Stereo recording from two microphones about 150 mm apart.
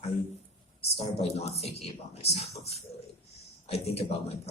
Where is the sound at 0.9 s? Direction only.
45° left (ahead or behind).